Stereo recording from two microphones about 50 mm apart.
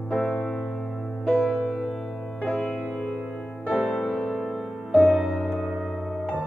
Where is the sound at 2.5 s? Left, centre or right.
Left.